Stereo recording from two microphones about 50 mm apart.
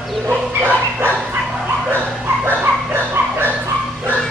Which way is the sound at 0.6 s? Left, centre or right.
Right.